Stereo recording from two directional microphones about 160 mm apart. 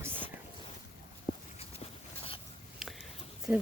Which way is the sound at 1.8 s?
40° left (ahead or behind).